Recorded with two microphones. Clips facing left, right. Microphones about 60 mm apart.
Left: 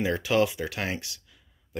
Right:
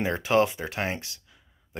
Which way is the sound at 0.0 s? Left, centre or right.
Right.